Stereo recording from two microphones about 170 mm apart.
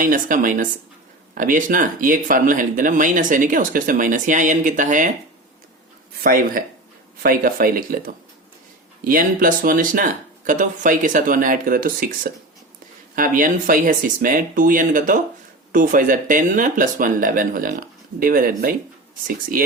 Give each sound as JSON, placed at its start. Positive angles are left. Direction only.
{"t": 0.0, "sound": "speech", "side_deg": -55}
{"t": 6.2, "sound": "speech", "side_deg": -60}